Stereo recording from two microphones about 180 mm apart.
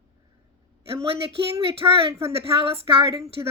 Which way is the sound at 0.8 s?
30° right (ahead or behind).